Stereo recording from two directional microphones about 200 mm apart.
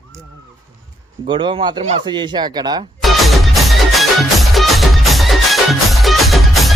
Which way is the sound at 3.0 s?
Centre (ahead or behind).